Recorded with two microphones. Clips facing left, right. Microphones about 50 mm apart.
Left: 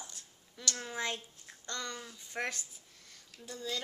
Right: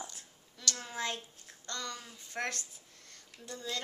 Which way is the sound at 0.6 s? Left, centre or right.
Left.